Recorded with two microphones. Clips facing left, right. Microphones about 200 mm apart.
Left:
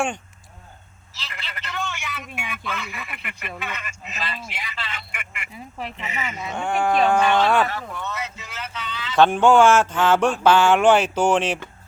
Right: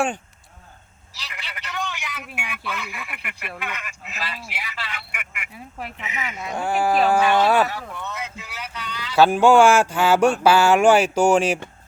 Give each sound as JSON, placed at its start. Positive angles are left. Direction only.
{"t": 1.2, "sound": "telephone", "side_deg": -15}
{"t": 2.1, "sound": "a sound", "side_deg": 0}
{"t": 2.7, "sound": "speech", "side_deg": -15}